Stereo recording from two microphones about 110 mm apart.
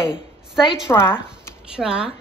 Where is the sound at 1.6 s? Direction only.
10° right (ahead or behind).